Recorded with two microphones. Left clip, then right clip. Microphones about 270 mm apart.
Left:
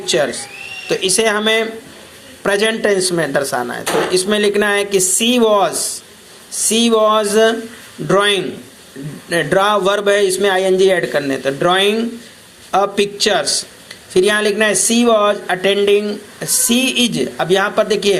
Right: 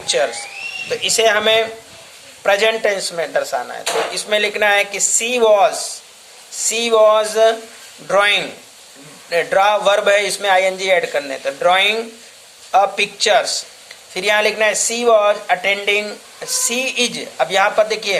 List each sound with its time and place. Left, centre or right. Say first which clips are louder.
0.0 s speech: left 1 dB; centre